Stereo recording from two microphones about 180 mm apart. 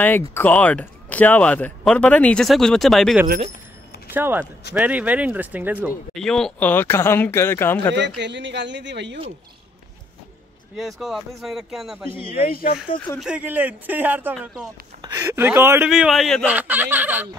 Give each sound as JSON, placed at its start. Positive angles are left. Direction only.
{"t": 0.0, "sound": "speech", "side_deg": 10}
{"t": 4.1, "sound": "speech", "side_deg": -10}
{"t": 6.1, "sound": "speech", "side_deg": 5}
{"t": 7.9, "sound": "speech", "side_deg": -75}
{"t": 10.8, "sound": "speech", "side_deg": 0}
{"t": 12.4, "sound": "speech", "side_deg": 55}
{"t": 13.2, "sound": "speech", "side_deg": -5}
{"t": 15.9, "sound": "speech", "side_deg": 0}